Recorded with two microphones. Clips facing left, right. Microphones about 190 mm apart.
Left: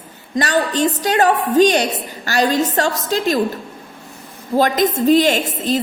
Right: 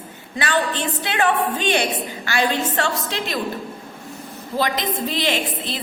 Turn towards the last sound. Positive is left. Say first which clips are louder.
# left 7 dB
turn(degrees=45)  # may be behind; listen again after turning